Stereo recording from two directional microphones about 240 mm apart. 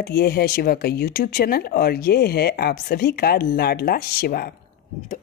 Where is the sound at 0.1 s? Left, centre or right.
Left.